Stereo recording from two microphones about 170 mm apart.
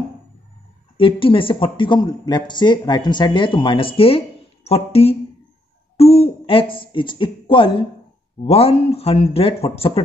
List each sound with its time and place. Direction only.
0.9 s speech: 30° left (ahead or behind)